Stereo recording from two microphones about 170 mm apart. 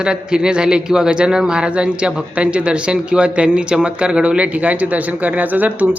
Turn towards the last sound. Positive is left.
turn(degrees=-10)  # may be behind; listen again after turning